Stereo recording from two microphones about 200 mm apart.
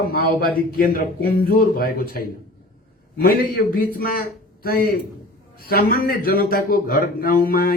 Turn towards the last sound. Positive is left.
turn(degrees=50)  # may be behind; listen again after turning